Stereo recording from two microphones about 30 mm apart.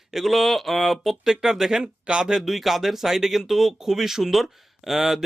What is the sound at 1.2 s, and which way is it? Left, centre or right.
Speech, right.